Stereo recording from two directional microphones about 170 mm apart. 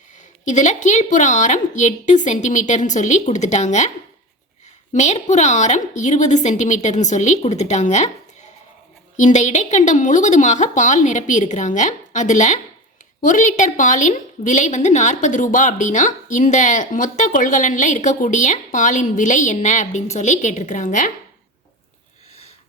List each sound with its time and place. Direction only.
0.4 s a woman's voice: 45° left (ahead or behind)
4.9 s a woman's voice: 40° left (ahead or behind)
9.1 s a woman's voice: 45° left (ahead or behind)